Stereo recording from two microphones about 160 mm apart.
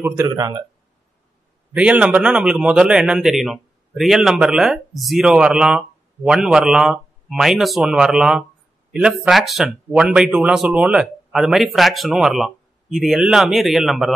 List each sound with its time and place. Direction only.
0.0 s speech: 20° right (ahead or behind)
1.7 s speech: 5° right (ahead or behind)